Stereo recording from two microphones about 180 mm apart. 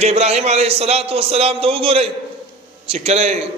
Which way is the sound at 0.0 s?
35° right (ahead or behind).